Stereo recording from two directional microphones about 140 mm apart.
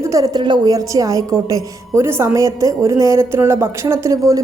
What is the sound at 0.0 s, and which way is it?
A woman's voice, 25° right (ahead or behind).